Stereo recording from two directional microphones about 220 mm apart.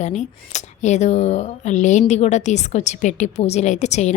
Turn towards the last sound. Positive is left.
turn(degrees=30)  # may be behind; listen again after turning